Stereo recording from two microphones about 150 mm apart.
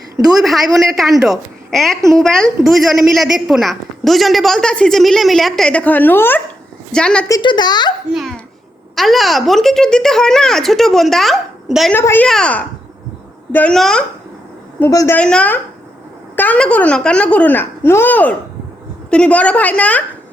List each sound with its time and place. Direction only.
0.3 s a woman's voice: centre (ahead or behind)
7.3 s a child's voice: 25° left (ahead or behind)
9.0 s a woman's voice: centre (ahead or behind)
11.9 s a woman's voice: 15° left (ahead or behind)
14.8 s speech: 20° left (ahead or behind)
15.2 s speech: 5° left (ahead or behind)